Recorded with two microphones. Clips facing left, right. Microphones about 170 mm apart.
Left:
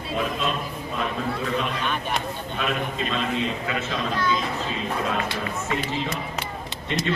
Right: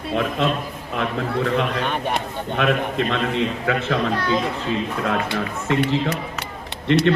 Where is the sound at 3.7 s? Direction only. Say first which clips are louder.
Right 6 dB; 65° right (ahead or behind).